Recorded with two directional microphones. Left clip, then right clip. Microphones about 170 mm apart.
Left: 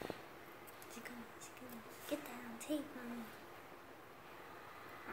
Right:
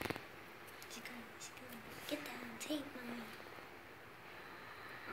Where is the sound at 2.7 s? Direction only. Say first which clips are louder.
Left 1 dB; 40° left (ahead or behind).